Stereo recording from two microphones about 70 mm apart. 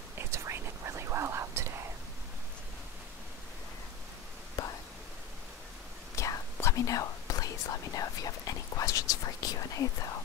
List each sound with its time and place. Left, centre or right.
0.2 s whispering: right
4.6 s whispering: left
6.1 s whispering: left